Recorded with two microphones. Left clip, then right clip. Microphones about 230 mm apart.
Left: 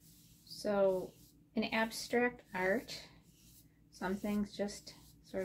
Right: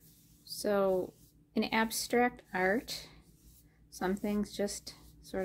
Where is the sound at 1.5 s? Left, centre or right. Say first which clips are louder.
Right 4 dB; right.